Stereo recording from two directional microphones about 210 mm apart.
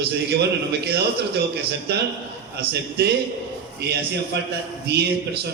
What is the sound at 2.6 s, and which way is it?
Speech, 50° right (ahead or behind).